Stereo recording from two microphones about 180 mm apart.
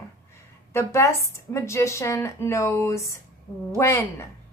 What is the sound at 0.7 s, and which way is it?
A woman's voice, 15° left (ahead or behind).